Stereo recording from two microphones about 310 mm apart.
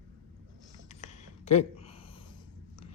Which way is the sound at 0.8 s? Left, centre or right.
Left.